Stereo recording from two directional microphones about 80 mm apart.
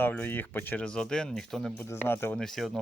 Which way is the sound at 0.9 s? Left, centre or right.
Centre.